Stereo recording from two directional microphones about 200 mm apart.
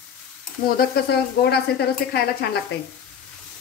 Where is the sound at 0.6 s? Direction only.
50° left (ahead or behind).